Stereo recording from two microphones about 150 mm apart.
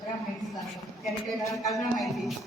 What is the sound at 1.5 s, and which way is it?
Speech, 20° left (ahead or behind).